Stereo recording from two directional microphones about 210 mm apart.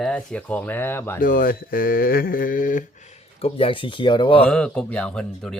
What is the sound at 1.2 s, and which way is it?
Speech, 40° left (ahead or behind).